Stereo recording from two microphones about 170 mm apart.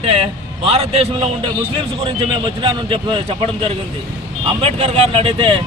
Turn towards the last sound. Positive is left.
turn(degrees=-30)  # may be behind; listen again after turning